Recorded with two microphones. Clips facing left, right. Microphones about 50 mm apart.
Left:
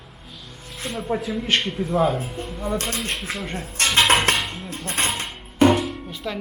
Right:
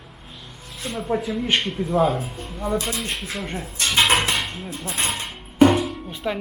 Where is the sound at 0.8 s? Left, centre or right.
Centre.